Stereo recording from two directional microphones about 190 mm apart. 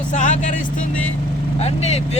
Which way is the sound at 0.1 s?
40° left (ahead or behind).